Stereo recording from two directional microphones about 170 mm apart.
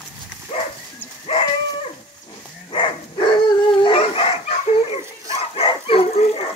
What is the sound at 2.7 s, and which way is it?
Dog, 30° left (ahead or behind).